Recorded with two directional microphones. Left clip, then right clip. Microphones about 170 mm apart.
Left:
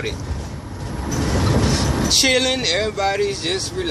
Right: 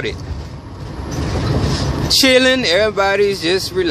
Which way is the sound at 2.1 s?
35° right (ahead or behind).